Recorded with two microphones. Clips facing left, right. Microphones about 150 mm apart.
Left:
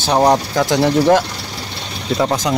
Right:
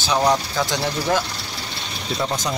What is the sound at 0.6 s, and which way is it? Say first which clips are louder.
Speech: left 9 dB; 80° left.